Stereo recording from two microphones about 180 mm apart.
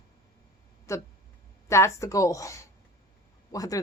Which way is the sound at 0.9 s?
15° left (ahead or behind).